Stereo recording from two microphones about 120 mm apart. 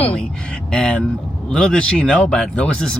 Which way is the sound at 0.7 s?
5° left (ahead or behind).